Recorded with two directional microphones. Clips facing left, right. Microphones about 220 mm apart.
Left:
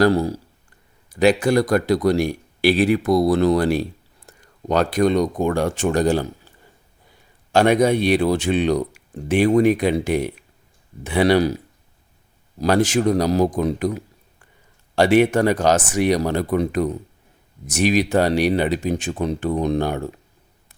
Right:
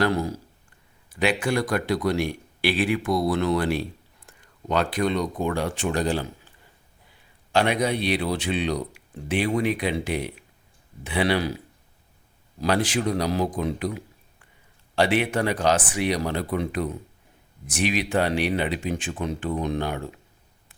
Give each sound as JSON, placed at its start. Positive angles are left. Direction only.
{"t": 0.0, "sound": "speech", "side_deg": 35}
{"t": 7.5, "sound": "speech", "side_deg": 45}